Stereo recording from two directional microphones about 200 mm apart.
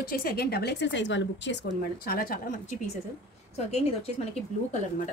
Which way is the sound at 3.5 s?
30° left (ahead or behind).